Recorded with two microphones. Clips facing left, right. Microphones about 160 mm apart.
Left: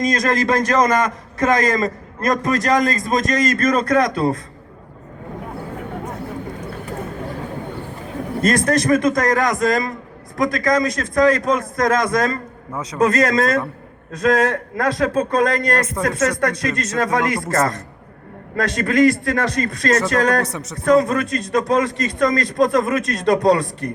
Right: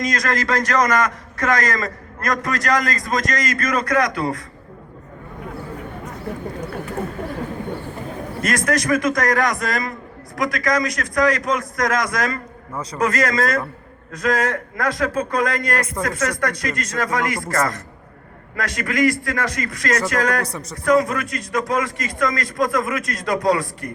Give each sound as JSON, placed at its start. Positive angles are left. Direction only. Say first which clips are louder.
{"t": 0.1, "sound": "a man's voice", "louder": "left 4 dB", "side_deg": 25}
{"t": 8.4, "sound": "a man's voice", "louder": "left 4 dB", "side_deg": 30}
{"t": 12.7, "sound": "a man's voice", "louder": "left 1 dB", "side_deg": 0}
{"t": 13.0, "sound": "a man's voice", "louder": "left 4 dB", "side_deg": 25}
{"t": 20.5, "sound": "a man's voice", "louder": "left 2 dB", "side_deg": 0}
{"t": 20.8, "sound": "a man's voice", "louder": "left 2 dB", "side_deg": 30}